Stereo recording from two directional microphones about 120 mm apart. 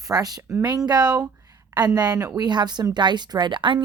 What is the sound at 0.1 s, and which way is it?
A woman's voice, 30° right (ahead or behind).